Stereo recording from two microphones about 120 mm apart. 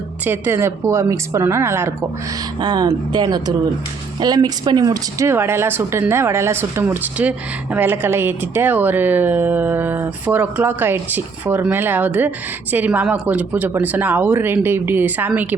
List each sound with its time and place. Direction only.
0.3 s a woman's voice: 20° right (ahead or behind)
2.6 s speech: 35° right (ahead or behind); by 15.3 s 15° right (ahead or behind)